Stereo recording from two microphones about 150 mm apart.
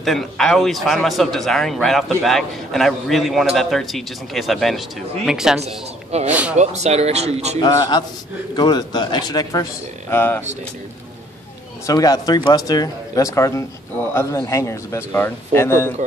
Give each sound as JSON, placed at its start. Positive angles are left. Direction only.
{"t": 0.0, "sound": "a man's voice", "side_deg": 0}
{"t": 6.1, "sound": "speech", "side_deg": -45}
{"t": 7.6, "sound": "speech", "side_deg": 30}
{"t": 11.8, "sound": "speech", "side_deg": 25}